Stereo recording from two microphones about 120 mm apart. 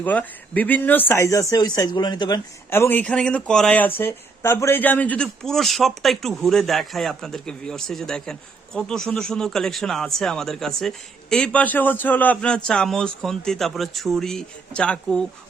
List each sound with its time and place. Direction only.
0.0 s speech: 15° left (ahead or behind); by 2.4 s 35° left (ahead or behind)
2.6 s speech: 20° left (ahead or behind)